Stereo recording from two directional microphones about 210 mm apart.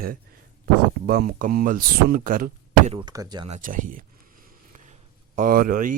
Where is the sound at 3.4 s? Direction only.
35° right (ahead or behind).